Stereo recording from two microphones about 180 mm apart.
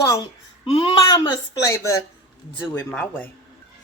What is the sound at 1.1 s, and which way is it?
Speech, 20° left (ahead or behind).